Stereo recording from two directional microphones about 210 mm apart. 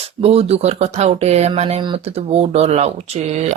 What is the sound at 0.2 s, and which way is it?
Speech, 30° right (ahead or behind).